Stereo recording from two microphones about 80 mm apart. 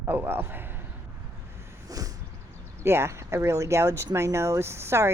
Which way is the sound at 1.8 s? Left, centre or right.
Right.